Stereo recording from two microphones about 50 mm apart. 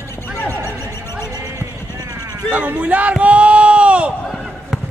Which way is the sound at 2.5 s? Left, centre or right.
Right.